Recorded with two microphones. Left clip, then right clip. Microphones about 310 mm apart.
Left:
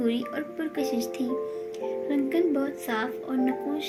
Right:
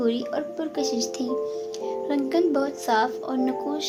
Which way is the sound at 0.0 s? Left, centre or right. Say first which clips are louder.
Right 4 dB; right.